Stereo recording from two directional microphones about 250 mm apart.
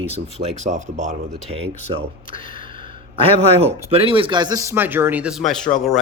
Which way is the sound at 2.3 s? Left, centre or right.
Left.